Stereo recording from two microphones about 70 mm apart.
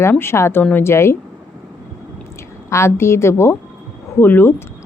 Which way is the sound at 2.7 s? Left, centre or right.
Left.